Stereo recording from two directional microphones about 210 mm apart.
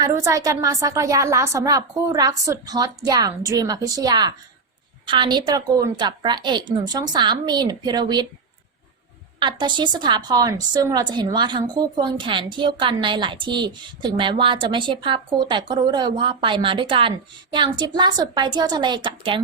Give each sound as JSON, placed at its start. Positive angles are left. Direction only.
{"t": 0.0, "sound": "a woman's voice", "side_deg": -15}
{"t": 9.4, "sound": "a woman's voice", "side_deg": -20}